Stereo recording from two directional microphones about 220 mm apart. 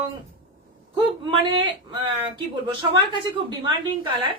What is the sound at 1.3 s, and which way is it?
Speech, 20° right (ahead or behind).